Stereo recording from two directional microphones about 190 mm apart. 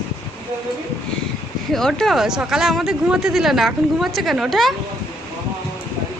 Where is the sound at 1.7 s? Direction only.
Centre (ahead or behind).